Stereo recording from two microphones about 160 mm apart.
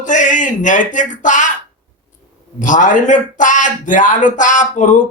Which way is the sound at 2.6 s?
50° left (ahead or behind).